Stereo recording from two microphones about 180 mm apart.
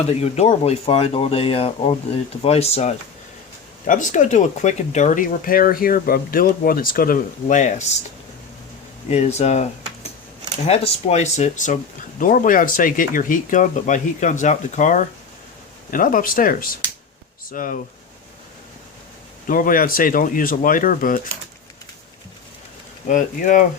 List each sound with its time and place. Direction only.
0.1 s speech: 35° left (ahead or behind)
3.8 s speech: 45° left (ahead or behind)
7.4 s speech: 40° left (ahead or behind)
9.0 s speech: 35° left (ahead or behind)
19.5 s speech: 50° left (ahead or behind)
23.0 s speech: 45° left (ahead or behind)